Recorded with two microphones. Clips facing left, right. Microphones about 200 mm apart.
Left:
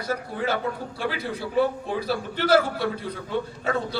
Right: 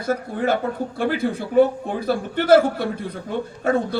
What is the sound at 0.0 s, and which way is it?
A man's voice, 50° right (ahead or behind).